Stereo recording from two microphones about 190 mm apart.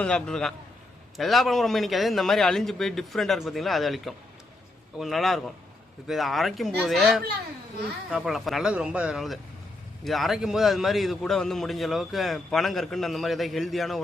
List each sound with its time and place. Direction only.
0.0 s a man's voice: 5° left (ahead or behind)